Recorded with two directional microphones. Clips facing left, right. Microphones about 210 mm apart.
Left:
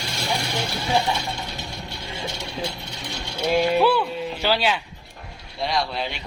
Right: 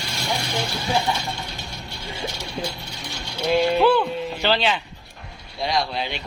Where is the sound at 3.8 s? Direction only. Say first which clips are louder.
Right 2 dB; 10° left (ahead or behind).